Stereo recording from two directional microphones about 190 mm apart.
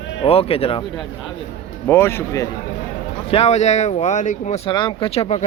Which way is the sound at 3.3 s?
30° left (ahead or behind).